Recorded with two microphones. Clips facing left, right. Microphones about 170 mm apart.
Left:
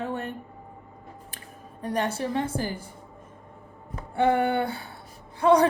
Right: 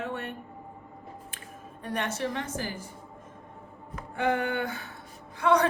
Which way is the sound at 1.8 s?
35° left (ahead or behind).